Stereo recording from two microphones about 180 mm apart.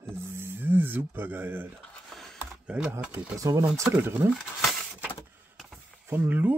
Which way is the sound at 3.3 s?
20° right (ahead or behind).